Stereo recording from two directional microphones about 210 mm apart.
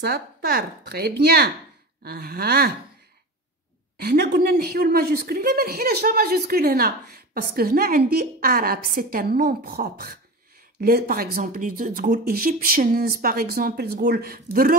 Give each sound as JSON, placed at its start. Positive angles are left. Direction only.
{"t": 0.8, "sound": "a woman's voice", "side_deg": -50}
{"t": 4.0, "sound": "a woman's voice", "side_deg": -45}